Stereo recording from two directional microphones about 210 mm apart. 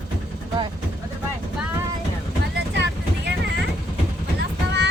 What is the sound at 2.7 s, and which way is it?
Vehicle, 55° right (ahead or behind).